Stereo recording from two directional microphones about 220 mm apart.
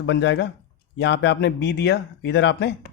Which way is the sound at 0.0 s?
50° left (ahead or behind).